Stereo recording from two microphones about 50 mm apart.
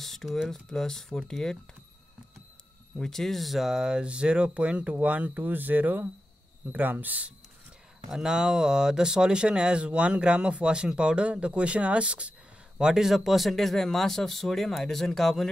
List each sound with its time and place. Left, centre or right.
0.0 s speech: centre
3.0 s speech: centre; by 7.2 s right
8.1 s speech: centre
12.9 s speech: centre